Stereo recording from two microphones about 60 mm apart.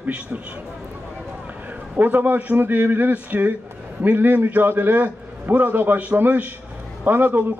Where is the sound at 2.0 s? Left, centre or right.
Right.